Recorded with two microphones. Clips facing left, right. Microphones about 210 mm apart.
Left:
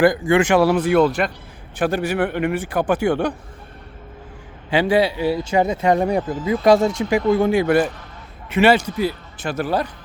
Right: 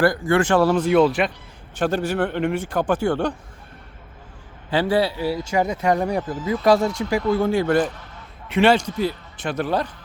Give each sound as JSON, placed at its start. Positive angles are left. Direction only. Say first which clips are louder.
{"t": 0.0, "sound": "a man's voice", "louder": "left 3 dB", "side_deg": 15}
{"t": 0.9, "sound": "speech", "louder": "right 1 dB", "side_deg": 0}
{"t": 1.8, "sound": "a man's voice", "louder": "left 1 dB", "side_deg": 10}
{"t": 4.7, "sound": "a man's voice", "louder": "left 3 dB", "side_deg": 15}